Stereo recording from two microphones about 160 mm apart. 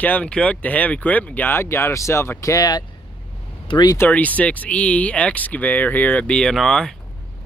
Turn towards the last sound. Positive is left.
turn(degrees=5)  # may be behind; listen again after turning